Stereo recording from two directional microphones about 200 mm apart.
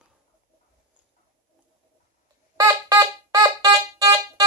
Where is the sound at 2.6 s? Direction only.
15° right (ahead or behind).